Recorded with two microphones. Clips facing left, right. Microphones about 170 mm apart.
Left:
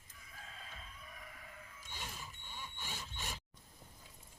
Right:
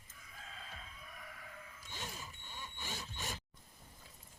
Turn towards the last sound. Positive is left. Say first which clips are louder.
# right 2 dB
turn(degrees=-40)  # may be behind; listen again after turning